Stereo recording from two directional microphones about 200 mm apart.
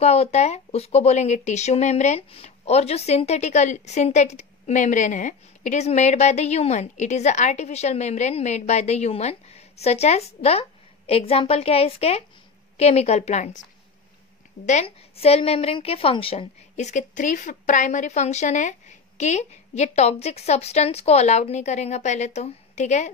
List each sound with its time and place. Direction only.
0.0 s speech: 30° left (ahead or behind)
14.7 s speech: 30° left (ahead or behind)